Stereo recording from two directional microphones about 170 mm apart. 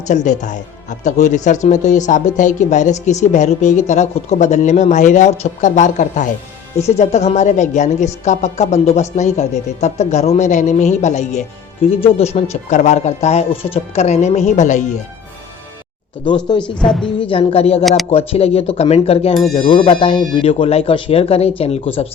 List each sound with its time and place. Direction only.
0.1 s a woman's voice: 45° left (ahead or behind)
16.6 s a woman's voice: 5° left (ahead or behind)
17.2 s a woman's voice: 30° left (ahead or behind)